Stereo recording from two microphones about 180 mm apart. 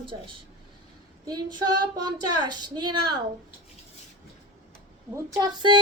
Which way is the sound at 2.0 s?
25° right (ahead or behind).